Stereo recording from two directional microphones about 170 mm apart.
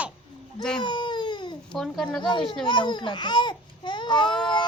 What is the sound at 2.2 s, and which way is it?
A child's voice, 30° left (ahead or behind).